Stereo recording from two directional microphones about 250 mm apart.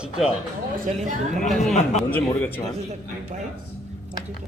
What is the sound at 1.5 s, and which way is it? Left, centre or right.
A man's voice, centre.